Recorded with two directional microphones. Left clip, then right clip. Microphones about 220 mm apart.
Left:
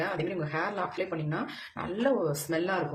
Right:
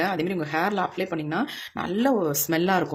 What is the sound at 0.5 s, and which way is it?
Speech, 45° right (ahead or behind).